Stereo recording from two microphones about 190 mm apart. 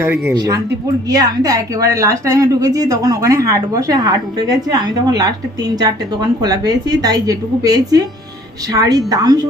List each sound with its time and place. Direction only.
0.3 s speech: 20° right (ahead or behind)